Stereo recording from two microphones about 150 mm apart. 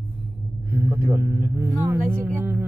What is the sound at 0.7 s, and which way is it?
Speech, 20° right (ahead or behind).